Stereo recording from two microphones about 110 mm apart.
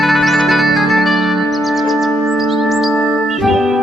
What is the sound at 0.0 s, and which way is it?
Music, centre (ahead or behind).